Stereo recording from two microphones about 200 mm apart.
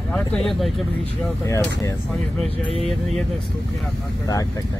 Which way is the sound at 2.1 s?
Centre (ahead or behind).